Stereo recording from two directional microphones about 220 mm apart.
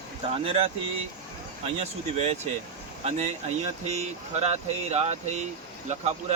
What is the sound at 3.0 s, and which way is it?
Speech, 30° right (ahead or behind).